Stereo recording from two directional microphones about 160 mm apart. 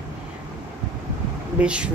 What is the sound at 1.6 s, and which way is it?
Speech, 5° right (ahead or behind).